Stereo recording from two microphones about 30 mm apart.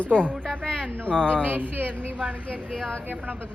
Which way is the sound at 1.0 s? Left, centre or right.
Left.